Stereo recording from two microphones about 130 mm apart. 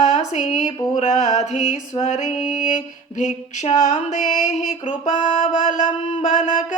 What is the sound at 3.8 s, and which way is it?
Music, 70° left (ahead or behind).